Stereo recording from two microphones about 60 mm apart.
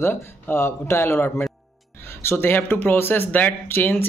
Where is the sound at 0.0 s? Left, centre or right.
Left.